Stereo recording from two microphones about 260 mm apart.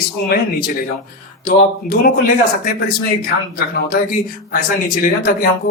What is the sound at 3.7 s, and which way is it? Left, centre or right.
Speech, left.